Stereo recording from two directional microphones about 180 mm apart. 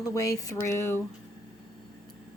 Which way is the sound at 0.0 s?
20° left (ahead or behind).